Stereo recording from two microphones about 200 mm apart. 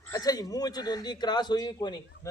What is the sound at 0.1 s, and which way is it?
A man's voice, 20° left (ahead or behind).